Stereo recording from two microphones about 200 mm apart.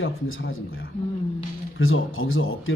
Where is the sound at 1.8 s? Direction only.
90° left.